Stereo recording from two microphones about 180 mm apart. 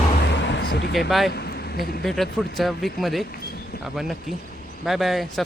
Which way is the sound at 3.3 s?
60° left (ahead or behind).